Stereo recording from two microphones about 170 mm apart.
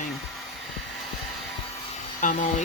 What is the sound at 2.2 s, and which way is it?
Speech, 45° left (ahead or behind).